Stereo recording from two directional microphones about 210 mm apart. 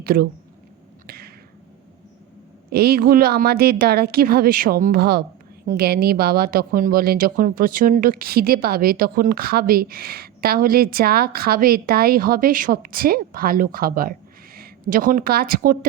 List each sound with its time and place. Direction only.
0.0 s speech: 45° right (ahead or behind)
1.0 s a sound: 45° right (ahead or behind)
2.7 s speech: 45° right (ahead or behind)